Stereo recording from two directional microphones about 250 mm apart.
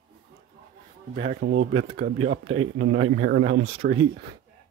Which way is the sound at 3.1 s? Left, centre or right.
Right.